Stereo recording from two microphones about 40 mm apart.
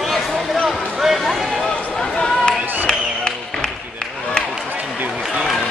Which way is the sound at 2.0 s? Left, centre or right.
Left.